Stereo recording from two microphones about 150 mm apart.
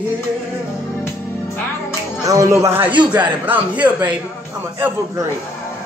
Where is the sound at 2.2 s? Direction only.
20° right (ahead or behind).